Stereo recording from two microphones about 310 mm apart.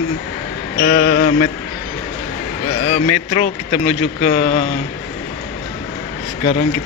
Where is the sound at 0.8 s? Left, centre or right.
Left.